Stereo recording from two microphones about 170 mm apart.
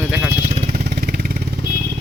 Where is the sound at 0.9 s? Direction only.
60° right (ahead or behind).